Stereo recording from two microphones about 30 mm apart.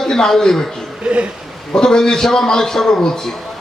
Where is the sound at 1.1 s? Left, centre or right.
Right.